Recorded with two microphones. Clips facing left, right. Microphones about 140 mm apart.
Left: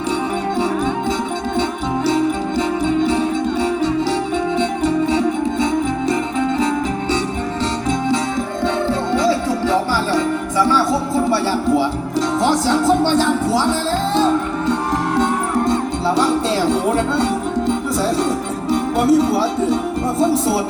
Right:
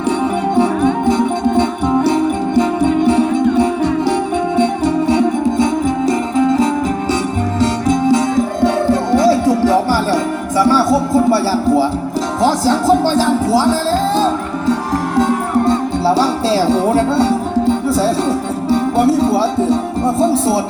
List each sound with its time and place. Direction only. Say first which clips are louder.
0.5 s music: right 7 dB; 60° right (ahead or behind)
3.1 s music: right 5 dB; 55° right (ahead or behind)
4.8 s music: right 3 dB; 40° right (ahead or behind)
15.6 s music: right 4 dB; 30° right (ahead or behind)